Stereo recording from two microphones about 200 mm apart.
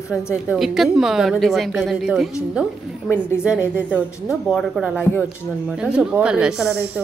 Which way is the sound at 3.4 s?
5° right (ahead or behind).